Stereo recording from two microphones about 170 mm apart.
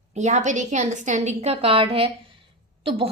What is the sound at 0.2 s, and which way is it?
A woman's voice, 45° right (ahead or behind).